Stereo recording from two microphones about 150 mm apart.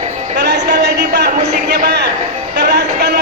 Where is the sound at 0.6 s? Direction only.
90° right.